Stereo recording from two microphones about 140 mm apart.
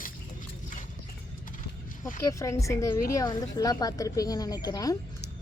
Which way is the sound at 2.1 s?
20° left (ahead or behind).